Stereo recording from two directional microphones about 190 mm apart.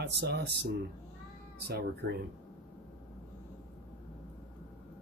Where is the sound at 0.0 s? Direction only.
60° right (ahead or behind).